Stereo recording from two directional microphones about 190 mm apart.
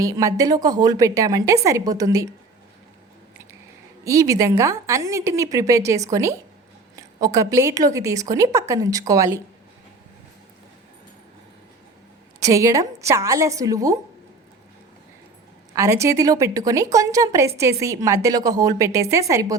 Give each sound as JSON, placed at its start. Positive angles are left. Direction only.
{"t": 0.0, "sound": "a woman's voice", "side_deg": -15}
{"t": 4.0, "sound": "a woman's voice", "side_deg": -15}
{"t": 12.4, "sound": "a woman's voice", "side_deg": -15}
{"t": 15.7, "sound": "a woman's voice", "side_deg": -15}